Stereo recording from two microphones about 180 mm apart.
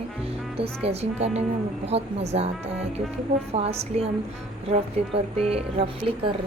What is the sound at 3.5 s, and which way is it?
Speech, 35° right (ahead or behind).